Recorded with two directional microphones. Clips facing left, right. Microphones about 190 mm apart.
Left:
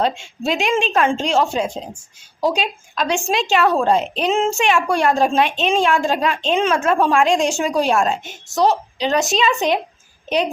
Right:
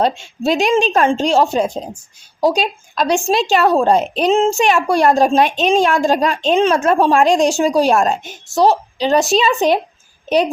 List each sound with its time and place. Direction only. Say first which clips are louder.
0.0 s a woman's voice: right 4 dB; 35° right (ahead or behind)